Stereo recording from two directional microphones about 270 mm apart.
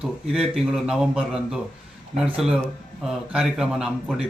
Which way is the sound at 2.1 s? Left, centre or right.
Right.